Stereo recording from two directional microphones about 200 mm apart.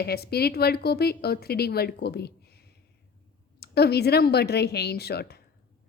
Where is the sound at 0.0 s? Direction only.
50° left (ahead or behind).